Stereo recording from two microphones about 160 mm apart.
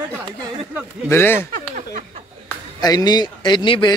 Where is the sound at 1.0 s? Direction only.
15° left (ahead or behind).